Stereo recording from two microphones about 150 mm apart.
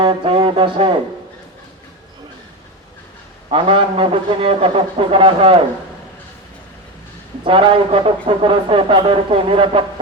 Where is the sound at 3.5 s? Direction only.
35° right (ahead or behind).